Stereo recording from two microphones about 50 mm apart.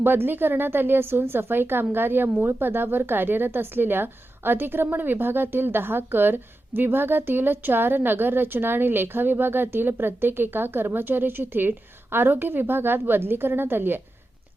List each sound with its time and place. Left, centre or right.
0.0 s speech: right